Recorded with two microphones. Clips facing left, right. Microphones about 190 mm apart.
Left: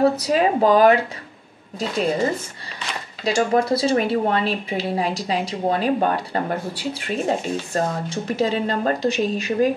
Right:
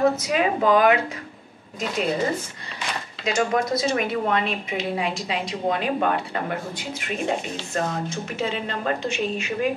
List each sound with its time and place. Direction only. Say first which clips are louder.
0.0 s speech: left 3 dB; 35° left (ahead or behind)
3.3 s speech: left 4 dB; 35° left (ahead or behind)